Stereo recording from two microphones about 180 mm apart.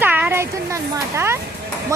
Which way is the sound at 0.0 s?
10° right (ahead or behind).